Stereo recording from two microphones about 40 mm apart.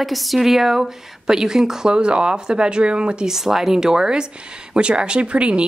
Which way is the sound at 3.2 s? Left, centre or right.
Centre.